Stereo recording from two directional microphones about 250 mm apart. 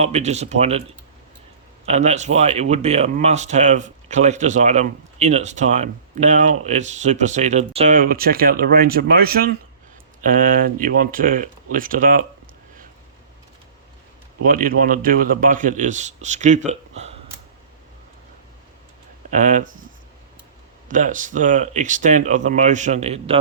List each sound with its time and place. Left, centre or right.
0.0 s speech: right
1.9 s a man's voice: right
14.4 s a man's voice: right
19.3 s a man's voice: right
20.8 s speech: right